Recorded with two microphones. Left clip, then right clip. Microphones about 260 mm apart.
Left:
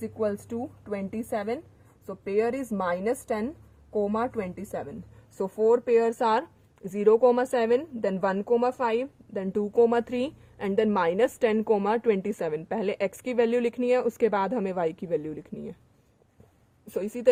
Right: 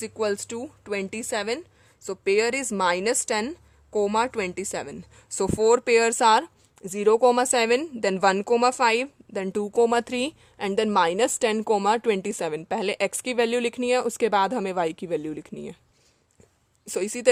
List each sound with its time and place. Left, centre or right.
0.0 s a woman's voice: right
16.8 s a woman's voice: right